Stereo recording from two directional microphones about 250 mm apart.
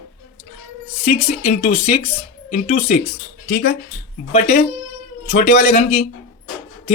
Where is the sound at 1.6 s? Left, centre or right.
Left.